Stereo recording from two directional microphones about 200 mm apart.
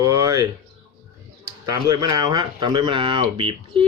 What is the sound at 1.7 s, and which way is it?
Speech, 20° right (ahead or behind).